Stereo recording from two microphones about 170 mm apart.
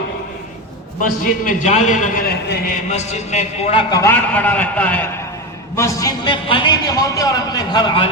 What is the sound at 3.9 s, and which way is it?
A man's voice, 15° left (ahead or behind).